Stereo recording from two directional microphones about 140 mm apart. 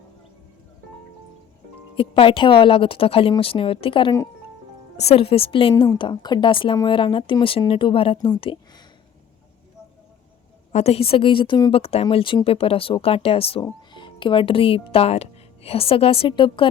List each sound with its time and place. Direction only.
2.0 s a woman's voice: 40° left (ahead or behind)
10.7 s a woman's voice: 50° left (ahead or behind); by 11.7 s 30° left (ahead or behind)
11.7 s a woman's voice: 45° left (ahead or behind)